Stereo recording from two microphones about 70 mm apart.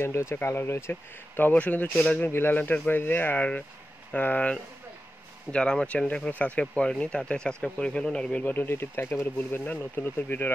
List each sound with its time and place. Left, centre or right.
0.0 s speech: left
5.5 s speech: centre
8.5 s speech: left